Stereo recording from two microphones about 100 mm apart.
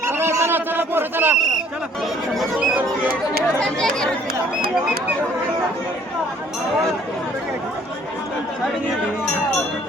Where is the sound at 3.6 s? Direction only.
5° left (ahead or behind).